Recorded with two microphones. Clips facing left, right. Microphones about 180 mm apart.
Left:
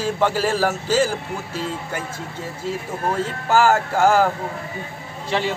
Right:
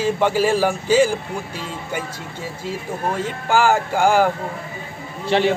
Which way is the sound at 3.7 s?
5° right (ahead or behind).